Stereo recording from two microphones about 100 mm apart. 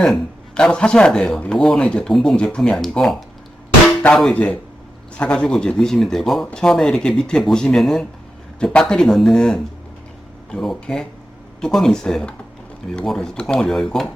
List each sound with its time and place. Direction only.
0.0 s speech: 5° left (ahead or behind)